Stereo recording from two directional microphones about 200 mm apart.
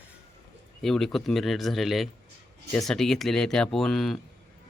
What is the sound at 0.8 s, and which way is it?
Speech, centre (ahead or behind).